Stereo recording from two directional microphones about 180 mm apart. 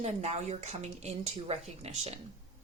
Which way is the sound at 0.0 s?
40° right (ahead or behind).